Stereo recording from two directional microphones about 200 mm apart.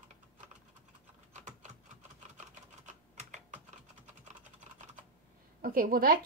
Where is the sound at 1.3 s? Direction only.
35° right (ahead or behind).